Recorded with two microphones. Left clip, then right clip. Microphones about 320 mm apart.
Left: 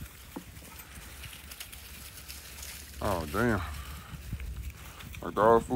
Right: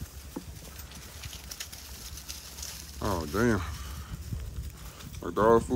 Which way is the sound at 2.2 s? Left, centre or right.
Centre.